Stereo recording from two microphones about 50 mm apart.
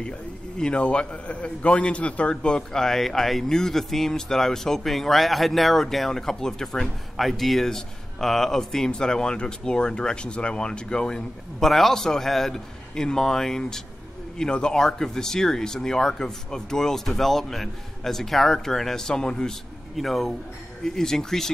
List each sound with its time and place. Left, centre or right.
0.6 s a man's voice: centre
11.6 s a man's voice: centre
20.0 s a man's voice: centre